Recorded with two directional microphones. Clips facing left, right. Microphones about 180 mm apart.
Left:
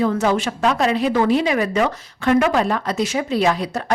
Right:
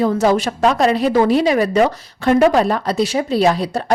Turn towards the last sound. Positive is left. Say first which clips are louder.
# right 3 dB
turn(degrees=-35)  # may be behind; listen again after turning